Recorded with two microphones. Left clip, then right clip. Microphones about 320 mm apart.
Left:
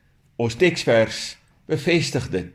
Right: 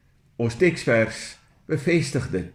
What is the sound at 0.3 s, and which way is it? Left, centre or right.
Speech, left.